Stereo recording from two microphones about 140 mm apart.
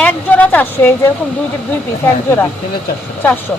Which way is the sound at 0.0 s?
10° left (ahead or behind).